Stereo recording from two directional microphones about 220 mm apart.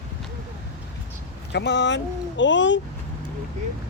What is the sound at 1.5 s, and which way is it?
Speech, 50° left (ahead or behind).